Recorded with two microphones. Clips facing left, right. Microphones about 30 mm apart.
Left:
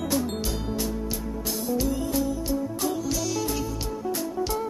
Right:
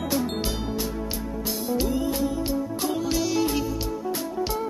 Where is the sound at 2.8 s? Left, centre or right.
Right.